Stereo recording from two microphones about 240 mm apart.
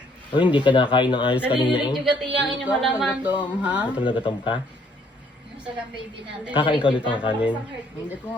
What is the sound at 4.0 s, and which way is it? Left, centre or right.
Speech, left.